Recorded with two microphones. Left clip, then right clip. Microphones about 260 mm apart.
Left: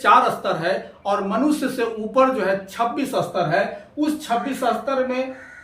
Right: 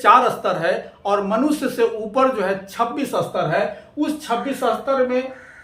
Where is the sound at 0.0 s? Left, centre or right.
Centre.